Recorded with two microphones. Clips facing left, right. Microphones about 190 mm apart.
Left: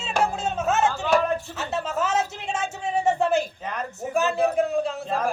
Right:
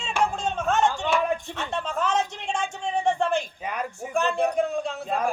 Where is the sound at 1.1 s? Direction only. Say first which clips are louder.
Left 3 dB; 40° left (ahead or behind).